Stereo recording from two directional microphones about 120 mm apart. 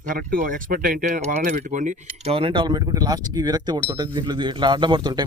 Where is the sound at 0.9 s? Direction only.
90° right.